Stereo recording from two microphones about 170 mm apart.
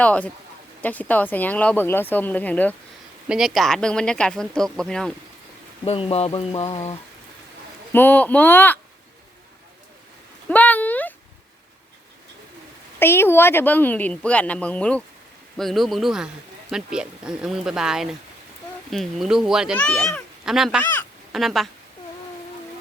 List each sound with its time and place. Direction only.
0.0 s speech: 10° left (ahead or behind)
3.2 s speech: 5° right (ahead or behind)
5.8 s speech: 35° left (ahead or behind)
7.9 s speech: 10° left (ahead or behind)
10.5 s a sound: 10° left (ahead or behind)
13.0 s a child's voice: 15° left (ahead or behind)